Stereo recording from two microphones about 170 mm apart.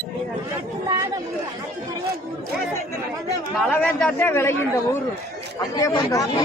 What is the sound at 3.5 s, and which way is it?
A man's voice, 10° left (ahead or behind).